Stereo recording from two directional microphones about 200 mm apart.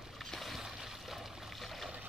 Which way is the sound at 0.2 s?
Centre (ahead or behind).